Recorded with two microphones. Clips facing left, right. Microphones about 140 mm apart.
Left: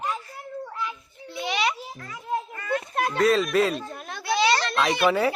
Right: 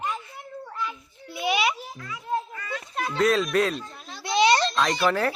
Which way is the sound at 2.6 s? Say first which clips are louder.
Left 5 dB; 55° left (ahead or behind).